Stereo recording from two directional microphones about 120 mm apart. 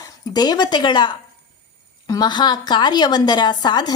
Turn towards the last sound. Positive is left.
turn(degrees=35)  # may be behind; listen again after turning